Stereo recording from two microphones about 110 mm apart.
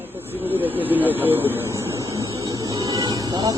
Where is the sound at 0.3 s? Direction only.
15° right (ahead or behind).